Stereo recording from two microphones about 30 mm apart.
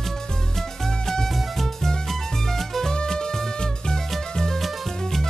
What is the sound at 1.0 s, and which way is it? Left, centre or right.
Music, centre.